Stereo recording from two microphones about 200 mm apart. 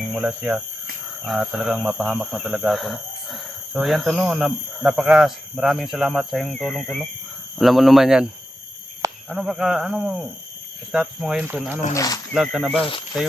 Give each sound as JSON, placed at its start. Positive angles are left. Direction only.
{"t": 0.1, "sound": "speech", "side_deg": -5}
{"t": 9.3, "sound": "speech", "side_deg": 0}
{"t": 11.9, "sound": "speech", "side_deg": 20}
{"t": 12.3, "sound": "speech", "side_deg": -5}
{"t": 12.8, "sound": "speech", "side_deg": 25}